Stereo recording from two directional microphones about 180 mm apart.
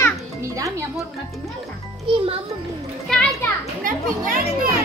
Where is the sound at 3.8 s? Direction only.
50° right (ahead or behind).